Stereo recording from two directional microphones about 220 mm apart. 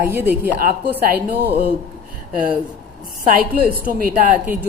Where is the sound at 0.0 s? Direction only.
10° right (ahead or behind).